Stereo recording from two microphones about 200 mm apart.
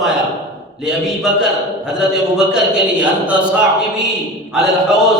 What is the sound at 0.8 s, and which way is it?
A man's voice, 5° right (ahead or behind).